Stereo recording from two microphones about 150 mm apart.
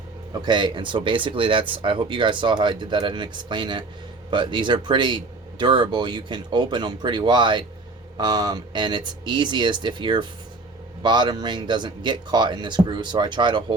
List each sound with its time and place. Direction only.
0.4 s speech: 30° right (ahead or behind)